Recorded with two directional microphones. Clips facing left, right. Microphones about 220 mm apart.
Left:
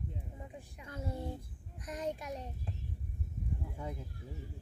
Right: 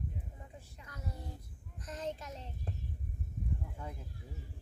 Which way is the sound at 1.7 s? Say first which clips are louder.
Left 2 dB; 15° left (ahead or behind).